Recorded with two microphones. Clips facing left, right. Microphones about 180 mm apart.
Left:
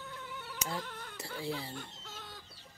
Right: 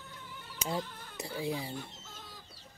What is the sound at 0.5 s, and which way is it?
Speech, 20° right (ahead or behind).